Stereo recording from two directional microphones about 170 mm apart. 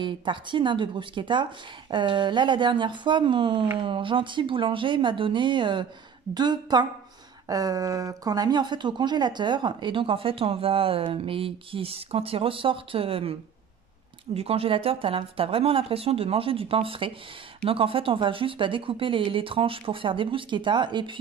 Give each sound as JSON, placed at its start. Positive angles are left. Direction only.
{"t": 0.0, "sound": "speech", "side_deg": -30}